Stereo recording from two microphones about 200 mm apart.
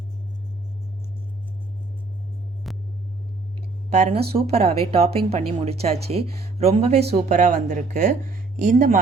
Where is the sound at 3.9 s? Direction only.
35° right (ahead or behind).